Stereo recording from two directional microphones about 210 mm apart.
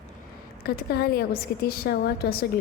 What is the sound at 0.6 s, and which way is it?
A woman's voice, 45° left (ahead or behind).